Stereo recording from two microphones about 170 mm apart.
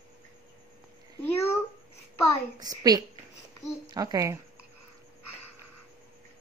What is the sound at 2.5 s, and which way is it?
A woman's voice, 20° right (ahead or behind).